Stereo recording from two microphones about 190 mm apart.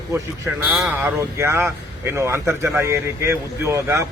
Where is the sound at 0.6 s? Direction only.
5° right (ahead or behind).